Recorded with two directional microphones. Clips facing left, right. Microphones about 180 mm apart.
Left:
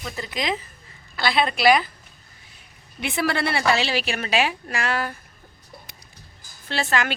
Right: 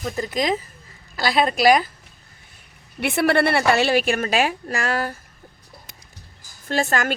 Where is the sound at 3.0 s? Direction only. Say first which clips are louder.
Right 6 dB; 60° right (ahead or behind); by 5.1 s 40° right (ahead or behind).